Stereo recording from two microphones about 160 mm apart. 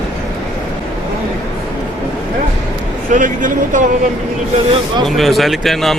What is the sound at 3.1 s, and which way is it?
Speech, 55° right (ahead or behind).